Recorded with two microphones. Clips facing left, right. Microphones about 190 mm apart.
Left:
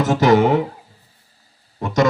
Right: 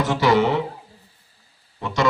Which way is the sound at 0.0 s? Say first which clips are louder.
Left 4 dB; 45° left (ahead or behind).